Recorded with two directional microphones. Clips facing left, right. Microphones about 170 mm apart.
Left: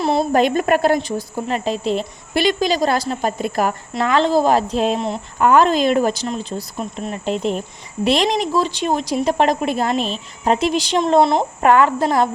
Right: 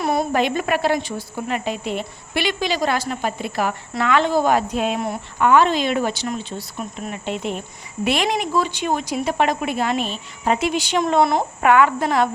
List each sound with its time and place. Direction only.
0.0 s a sound: 25° left (ahead or behind)
0.3 s a woman's voice: 45° left (ahead or behind)
1.5 s a woman's voice: 35° left (ahead or behind)
4.9 s speech: 25° left (ahead or behind)
5.4 s a woman's voice: 40° left (ahead or behind); by 11.4 s 25° left (ahead or behind)
11.6 s a woman's voice: 35° left (ahead or behind)